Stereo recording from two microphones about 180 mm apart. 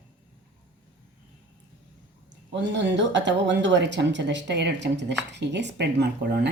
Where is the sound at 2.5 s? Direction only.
80° right.